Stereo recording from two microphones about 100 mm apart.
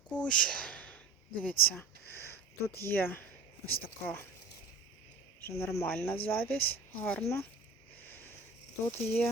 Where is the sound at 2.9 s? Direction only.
20° left (ahead or behind).